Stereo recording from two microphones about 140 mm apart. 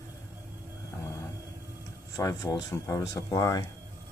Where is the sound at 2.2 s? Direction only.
25° left (ahead or behind).